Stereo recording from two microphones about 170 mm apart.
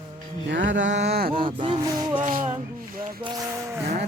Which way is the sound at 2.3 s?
55° right (ahead or behind).